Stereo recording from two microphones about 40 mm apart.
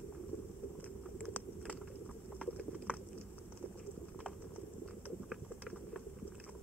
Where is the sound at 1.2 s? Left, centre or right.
Left.